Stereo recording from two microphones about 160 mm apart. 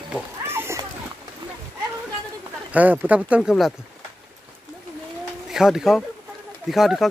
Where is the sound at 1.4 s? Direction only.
25° right (ahead or behind).